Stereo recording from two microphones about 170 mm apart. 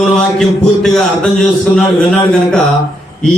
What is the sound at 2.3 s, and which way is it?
Speech, 5° left (ahead or behind).